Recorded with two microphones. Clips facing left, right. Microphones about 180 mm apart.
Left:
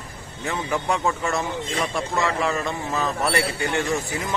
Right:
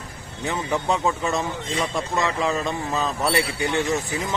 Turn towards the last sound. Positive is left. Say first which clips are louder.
# right 1 dB
turn(degrees=-20)  # may be behind; listen again after turning